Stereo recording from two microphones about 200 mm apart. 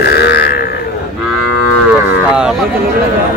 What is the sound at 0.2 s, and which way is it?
Livestock, 55° left (ahead or behind).